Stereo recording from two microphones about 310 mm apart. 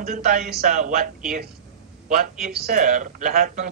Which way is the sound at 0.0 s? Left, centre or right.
Right.